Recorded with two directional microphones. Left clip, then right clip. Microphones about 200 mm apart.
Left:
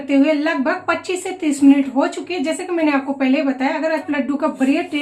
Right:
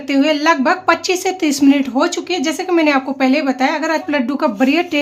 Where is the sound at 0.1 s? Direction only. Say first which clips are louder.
Right 3 dB; 55° right (ahead or behind).